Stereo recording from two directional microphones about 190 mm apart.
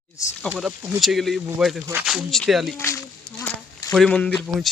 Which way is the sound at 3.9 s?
5° left (ahead or behind).